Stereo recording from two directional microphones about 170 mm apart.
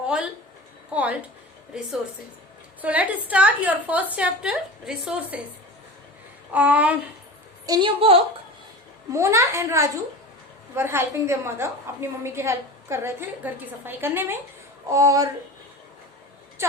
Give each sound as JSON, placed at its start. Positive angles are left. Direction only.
{"t": 0.0, "sound": "a woman's voice", "side_deg": -5}
{"t": 2.8, "sound": "a woman's voice", "side_deg": -10}
{"t": 6.5, "sound": "a woman's voice", "side_deg": -10}
{"t": 7.7, "sound": "a woman's voice", "side_deg": -30}
{"t": 9.1, "sound": "a woman's voice", "side_deg": -15}